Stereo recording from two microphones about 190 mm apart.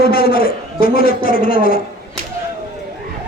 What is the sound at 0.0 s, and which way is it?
A man's voice, 50° left (ahead or behind).